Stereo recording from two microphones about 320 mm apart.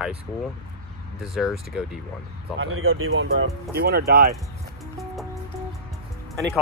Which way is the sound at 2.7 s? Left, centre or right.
Right.